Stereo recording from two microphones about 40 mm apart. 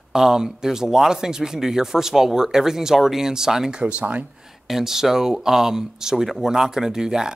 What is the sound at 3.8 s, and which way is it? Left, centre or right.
Speech, right.